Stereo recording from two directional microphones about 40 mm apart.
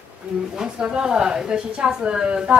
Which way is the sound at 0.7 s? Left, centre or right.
Right.